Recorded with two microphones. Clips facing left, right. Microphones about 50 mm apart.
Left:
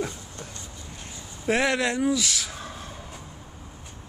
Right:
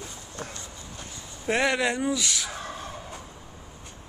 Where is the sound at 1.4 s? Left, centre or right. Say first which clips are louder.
Left 1 dB; centre.